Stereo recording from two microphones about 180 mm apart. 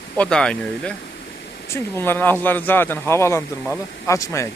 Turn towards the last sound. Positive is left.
turn(degrees=15)  # may be behind; listen again after turning